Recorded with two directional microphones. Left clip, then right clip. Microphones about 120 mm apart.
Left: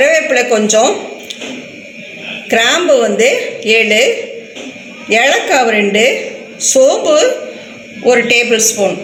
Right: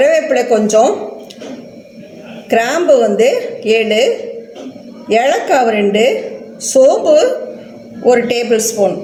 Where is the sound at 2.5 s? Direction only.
20° right (ahead or behind).